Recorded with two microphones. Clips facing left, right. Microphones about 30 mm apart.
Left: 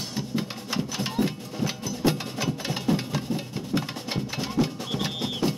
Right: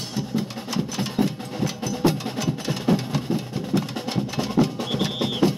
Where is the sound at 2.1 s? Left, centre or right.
Centre.